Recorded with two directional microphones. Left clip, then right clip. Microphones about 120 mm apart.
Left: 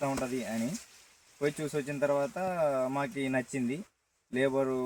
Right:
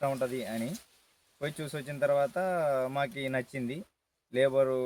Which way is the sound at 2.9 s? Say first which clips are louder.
Even; 30° right (ahead or behind).